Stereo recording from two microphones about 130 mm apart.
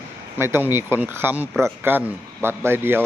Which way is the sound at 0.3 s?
20° right (ahead or behind).